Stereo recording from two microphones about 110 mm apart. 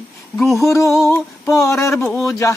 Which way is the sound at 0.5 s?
30° left (ahead or behind).